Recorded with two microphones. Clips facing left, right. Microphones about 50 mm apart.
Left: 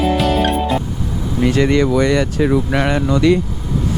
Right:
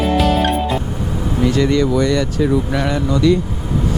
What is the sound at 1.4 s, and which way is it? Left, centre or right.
Speech, left.